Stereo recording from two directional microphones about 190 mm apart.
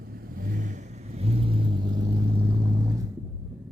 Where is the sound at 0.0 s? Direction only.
55° right (ahead or behind); by 3.1 s 20° right (ahead or behind).